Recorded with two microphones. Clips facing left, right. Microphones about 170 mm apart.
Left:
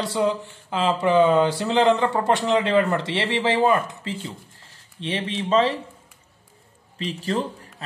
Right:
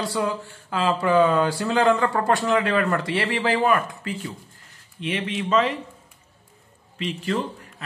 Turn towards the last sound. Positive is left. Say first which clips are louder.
# even
turn(degrees=35)  # may be behind; listen again after turning